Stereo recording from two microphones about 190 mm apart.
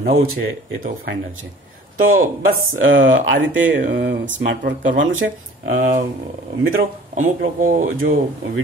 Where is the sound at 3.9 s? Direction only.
55° right (ahead or behind).